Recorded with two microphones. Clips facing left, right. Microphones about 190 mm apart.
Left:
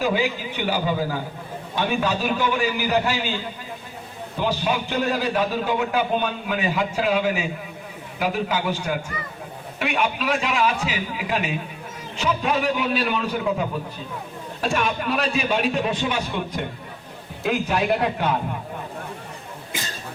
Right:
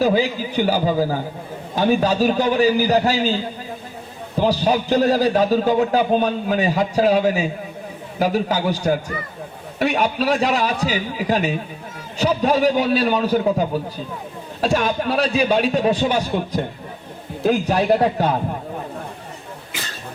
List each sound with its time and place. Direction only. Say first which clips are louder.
0.0 s a man's voice: right 5 dB; 40° right (ahead or behind)
4.4 s a man's voice: right 6 dB; 35° right (ahead or behind)